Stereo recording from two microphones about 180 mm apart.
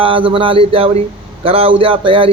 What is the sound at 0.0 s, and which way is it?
A man's voice, 30° right (ahead or behind).